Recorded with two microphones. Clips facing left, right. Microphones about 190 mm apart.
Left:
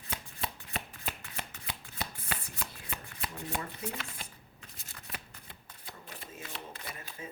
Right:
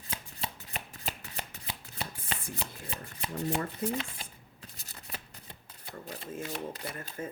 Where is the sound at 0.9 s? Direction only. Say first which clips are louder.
Right 1 dB; 40° right (ahead or behind).